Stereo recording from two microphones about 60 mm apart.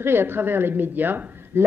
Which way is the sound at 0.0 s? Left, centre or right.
Right.